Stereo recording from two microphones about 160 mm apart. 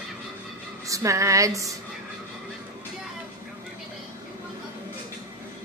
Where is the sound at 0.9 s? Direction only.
20° right (ahead or behind).